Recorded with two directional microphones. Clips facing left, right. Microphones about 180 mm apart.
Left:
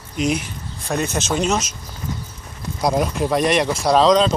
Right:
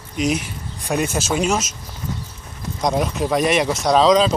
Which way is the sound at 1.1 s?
5° right (ahead or behind).